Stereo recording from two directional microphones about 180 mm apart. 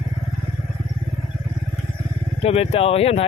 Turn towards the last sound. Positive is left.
turn(degrees=35)  # may be behind; listen again after turning